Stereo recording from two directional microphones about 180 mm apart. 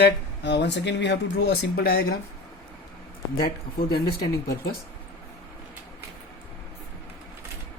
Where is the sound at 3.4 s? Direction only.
60° left (ahead or behind).